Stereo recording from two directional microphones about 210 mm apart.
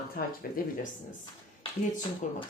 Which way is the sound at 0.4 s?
45° left (ahead or behind).